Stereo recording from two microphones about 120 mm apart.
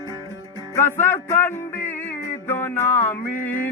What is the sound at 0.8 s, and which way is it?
Music, 20° left (ahead or behind).